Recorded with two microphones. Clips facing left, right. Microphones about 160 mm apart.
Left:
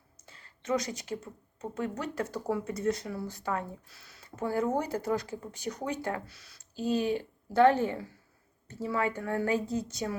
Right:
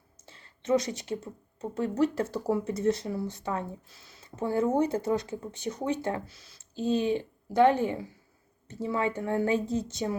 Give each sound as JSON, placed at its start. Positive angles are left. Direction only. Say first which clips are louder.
{"t": 0.3, "sound": "speech", "louder": "right 5 dB", "side_deg": -30}